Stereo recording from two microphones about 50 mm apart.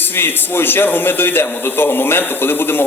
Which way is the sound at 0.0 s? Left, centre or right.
Left.